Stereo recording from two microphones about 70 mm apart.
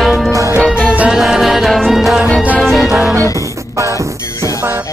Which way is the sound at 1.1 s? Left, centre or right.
Centre.